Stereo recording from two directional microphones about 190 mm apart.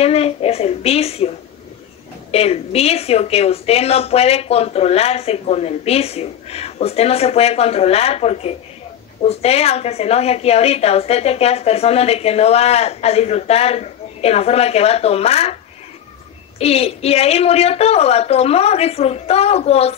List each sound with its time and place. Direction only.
0.0 s a woman's voice: 30° left (ahead or behind)
2.3 s a woman's voice: 30° left (ahead or behind)
16.5 s a woman's voice: 30° left (ahead or behind)